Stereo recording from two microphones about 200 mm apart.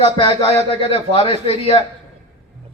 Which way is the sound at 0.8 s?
30° left (ahead or behind).